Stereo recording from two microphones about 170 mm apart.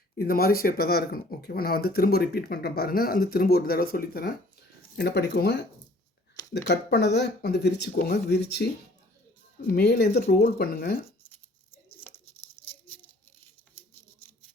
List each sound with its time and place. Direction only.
0.2 s speech: 60° left (ahead or behind)
4.9 s speech: 75° left (ahead or behind)
6.7 s speech: 75° left (ahead or behind)
9.7 s speech: 70° left (ahead or behind)